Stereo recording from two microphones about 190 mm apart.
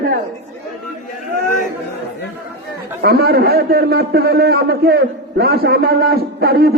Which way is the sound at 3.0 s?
55° right (ahead or behind).